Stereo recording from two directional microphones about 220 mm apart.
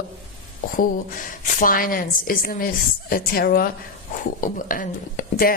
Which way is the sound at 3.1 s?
40° left (ahead or behind).